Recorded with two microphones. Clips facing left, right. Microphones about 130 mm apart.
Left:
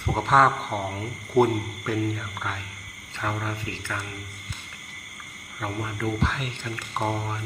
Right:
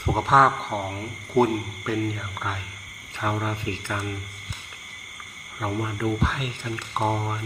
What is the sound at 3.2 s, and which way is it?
Speech, 15° right (ahead or behind).